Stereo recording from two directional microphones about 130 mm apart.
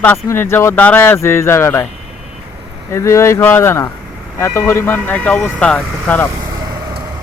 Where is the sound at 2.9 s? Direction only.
20° left (ahead or behind).